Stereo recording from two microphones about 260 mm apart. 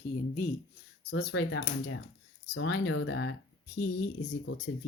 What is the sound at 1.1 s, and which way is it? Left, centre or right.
Speech, left.